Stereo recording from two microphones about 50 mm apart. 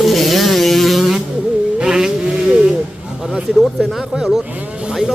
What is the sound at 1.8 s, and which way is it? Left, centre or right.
Vehicle, centre.